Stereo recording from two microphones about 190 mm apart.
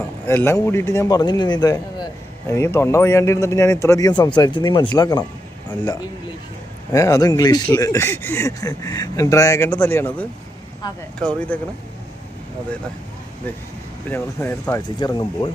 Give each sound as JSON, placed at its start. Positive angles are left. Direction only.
{"t": 0.3, "sound": "a man's voice", "side_deg": 15}
{"t": 10.8, "sound": "a man's voice", "side_deg": 20}
{"t": 11.2, "sound": "speech", "side_deg": 5}
{"t": 14.1, "sound": "speech", "side_deg": 10}
{"t": 14.8, "sound": "a man's voice", "side_deg": 20}